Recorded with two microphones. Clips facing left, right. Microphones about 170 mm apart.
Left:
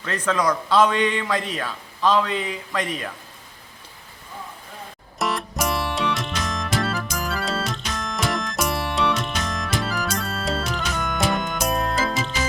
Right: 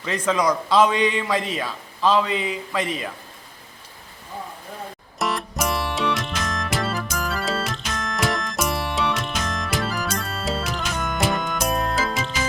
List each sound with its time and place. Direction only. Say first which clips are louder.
0.0 s a man's voice: right 1 dB; 10° right (ahead or behind)
5.2 s music: even; centre (ahead or behind)